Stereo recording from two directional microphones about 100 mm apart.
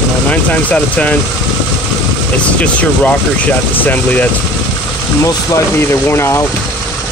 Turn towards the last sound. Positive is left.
turn(degrees=25)  # may be behind; listen again after turning